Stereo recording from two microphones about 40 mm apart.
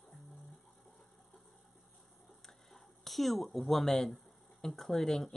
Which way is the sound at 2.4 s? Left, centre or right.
Centre.